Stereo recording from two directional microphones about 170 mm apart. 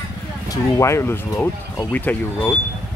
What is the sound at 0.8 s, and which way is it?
Speech, 15° left (ahead or behind).